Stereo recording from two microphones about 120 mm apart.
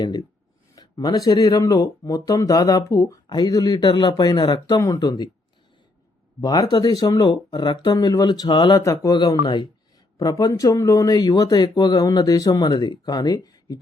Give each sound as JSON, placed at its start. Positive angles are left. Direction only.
{"t": 0.0, "sound": "speech", "side_deg": 35}
{"t": 6.4, "sound": "speech", "side_deg": 35}
{"t": 9.1, "sound": "speech", "side_deg": 40}
{"t": 10.2, "sound": "speech", "side_deg": 30}